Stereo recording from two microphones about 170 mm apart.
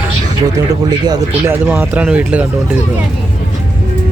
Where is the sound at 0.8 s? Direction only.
25° right (ahead or behind).